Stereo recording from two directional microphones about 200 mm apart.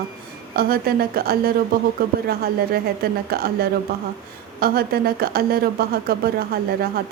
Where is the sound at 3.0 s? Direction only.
50° right (ahead or behind).